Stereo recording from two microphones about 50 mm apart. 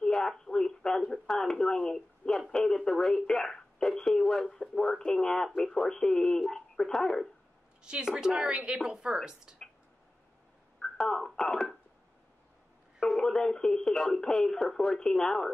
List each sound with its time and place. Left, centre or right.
0.0 s radio: centre
5.6 s speech: centre
7.8 s a woman's voice: centre
10.8 s a sound: centre
13.2 s speech: centre